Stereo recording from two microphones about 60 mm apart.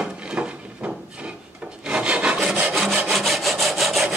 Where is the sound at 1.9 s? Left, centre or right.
Centre.